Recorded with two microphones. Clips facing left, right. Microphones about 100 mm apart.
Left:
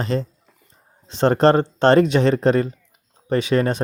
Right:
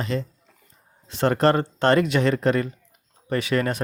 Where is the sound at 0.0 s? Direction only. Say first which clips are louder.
Left 4 dB; 35° left (ahead or behind).